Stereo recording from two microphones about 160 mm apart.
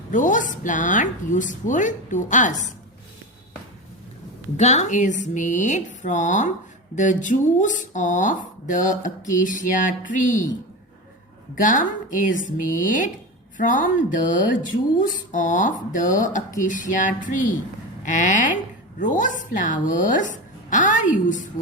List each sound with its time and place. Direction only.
0.1 s speech: 55° left (ahead or behind)
4.5 s speech: 45° left (ahead or behind)
11.5 s speech: 55° left (ahead or behind)